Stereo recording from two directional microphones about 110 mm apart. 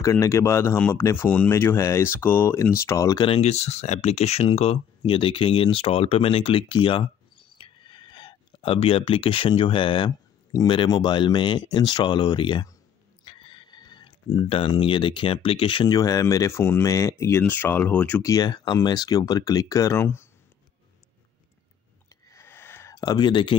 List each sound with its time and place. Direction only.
0.0 s speech: 25° left (ahead or behind)
3.2 s speech: 65° left (ahead or behind); by 8.6 s 45° left (ahead or behind)
8.6 s speech: 60° left (ahead or behind); by 12.6 s 45° left (ahead or behind)
13.2 s a sound: 50° left (ahead or behind)
15.9 s speech: 35° left (ahead or behind); by 18.2 s 15° left (ahead or behind)
18.2 s speech: 35° left (ahead or behind)
22.1 s a sound: 25° left (ahead or behind)
22.9 s speech: 40° left (ahead or behind)